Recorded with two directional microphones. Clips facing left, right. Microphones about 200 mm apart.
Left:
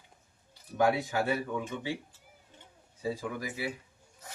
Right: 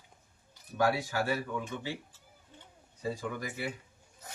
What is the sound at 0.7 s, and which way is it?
Speech, 20° left (ahead or behind).